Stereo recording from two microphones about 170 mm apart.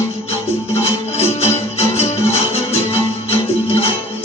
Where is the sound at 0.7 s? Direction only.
35° left (ahead or behind).